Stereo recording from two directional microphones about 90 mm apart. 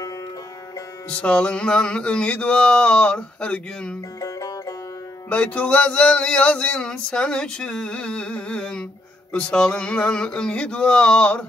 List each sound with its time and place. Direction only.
1.2 s male singing: 10° left (ahead or behind)
4.2 s music: 40° left (ahead or behind)
5.3 s male singing: 15° left (ahead or behind)